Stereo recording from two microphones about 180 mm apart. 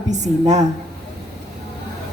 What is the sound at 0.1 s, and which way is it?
Speech, 40° right (ahead or behind).